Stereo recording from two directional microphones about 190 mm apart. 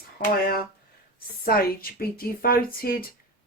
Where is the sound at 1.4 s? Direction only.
50° left (ahead or behind).